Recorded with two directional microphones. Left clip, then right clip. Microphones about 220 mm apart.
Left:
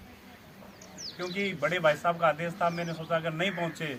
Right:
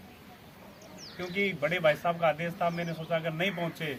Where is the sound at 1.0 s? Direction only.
5° left (ahead or behind).